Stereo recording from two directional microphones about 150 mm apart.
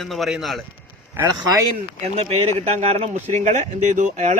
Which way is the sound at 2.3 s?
45° right (ahead or behind).